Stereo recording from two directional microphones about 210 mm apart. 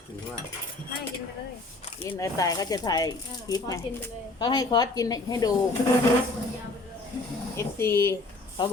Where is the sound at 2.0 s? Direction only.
15° left (ahead or behind).